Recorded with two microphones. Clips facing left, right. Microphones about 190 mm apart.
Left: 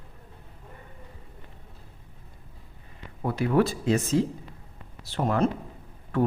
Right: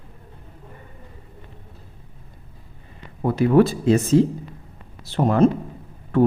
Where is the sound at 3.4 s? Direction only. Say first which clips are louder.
Right 7 dB; 30° right (ahead or behind).